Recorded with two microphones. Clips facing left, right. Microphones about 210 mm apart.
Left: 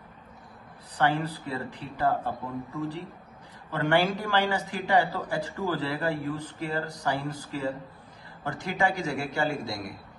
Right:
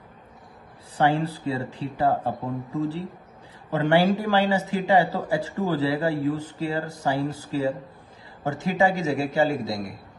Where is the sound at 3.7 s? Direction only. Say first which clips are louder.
Right 5 dB; 20° right (ahead or behind).